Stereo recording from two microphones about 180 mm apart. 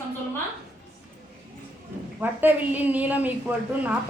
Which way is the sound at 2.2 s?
10° right (ahead or behind).